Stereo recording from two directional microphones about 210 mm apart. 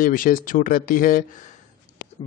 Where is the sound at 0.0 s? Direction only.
40° left (ahead or behind).